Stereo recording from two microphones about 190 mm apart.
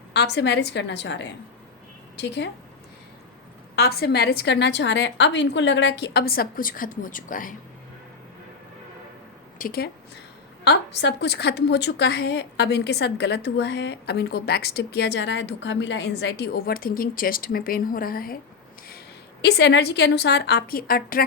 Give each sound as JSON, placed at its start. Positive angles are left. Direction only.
{"t": 0.1, "sound": "a woman's voice", "side_deg": 65}
{"t": 3.8, "sound": "a woman's voice", "side_deg": 55}
{"t": 9.6, "sound": "speech", "side_deg": 50}
{"t": 10.6, "sound": "a woman's voice", "side_deg": 65}
{"t": 19.4, "sound": "a woman's voice", "side_deg": 60}